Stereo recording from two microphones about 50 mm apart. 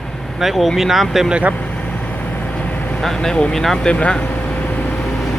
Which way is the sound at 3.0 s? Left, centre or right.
Centre.